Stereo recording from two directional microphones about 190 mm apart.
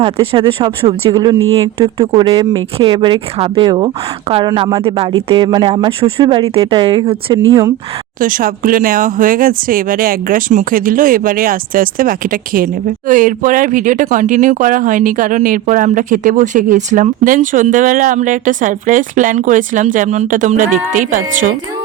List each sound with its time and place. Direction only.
0.0 s a woman's voice: 30° right (ahead or behind)
8.2 s speech: 45° right (ahead or behind)